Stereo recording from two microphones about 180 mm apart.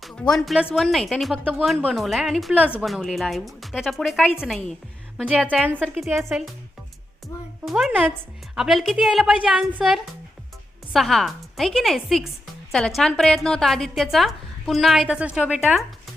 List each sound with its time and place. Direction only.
0.0 s a woman's voice: centre (ahead or behind)
7.6 s a woman's voice: centre (ahead or behind)